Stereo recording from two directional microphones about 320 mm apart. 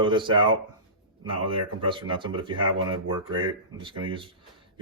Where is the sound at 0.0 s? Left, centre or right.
Centre.